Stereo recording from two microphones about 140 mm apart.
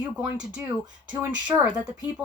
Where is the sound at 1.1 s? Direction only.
10° right (ahead or behind).